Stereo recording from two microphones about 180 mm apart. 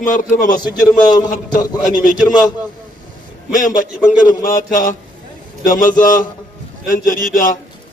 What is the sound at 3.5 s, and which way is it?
A man's voice, 45° left (ahead or behind).